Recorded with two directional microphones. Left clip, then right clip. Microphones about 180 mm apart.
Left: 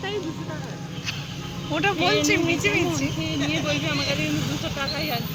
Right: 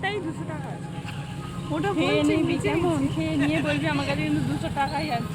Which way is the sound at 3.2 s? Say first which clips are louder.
Right 1 dB; 70° right (ahead or behind).